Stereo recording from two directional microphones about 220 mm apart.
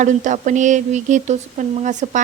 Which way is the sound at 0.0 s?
35° right (ahead or behind).